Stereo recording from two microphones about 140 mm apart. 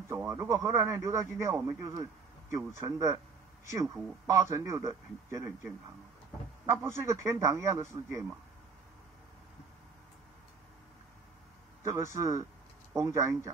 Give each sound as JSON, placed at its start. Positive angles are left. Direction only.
{"t": 0.1, "sound": "a man's voice", "side_deg": -20}
{"t": 6.7, "sound": "a man's voice", "side_deg": -20}
{"t": 12.2, "sound": "a man's voice", "side_deg": -25}